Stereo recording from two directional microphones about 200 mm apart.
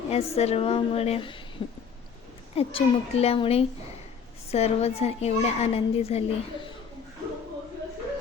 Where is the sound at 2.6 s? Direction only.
30° left (ahead or behind).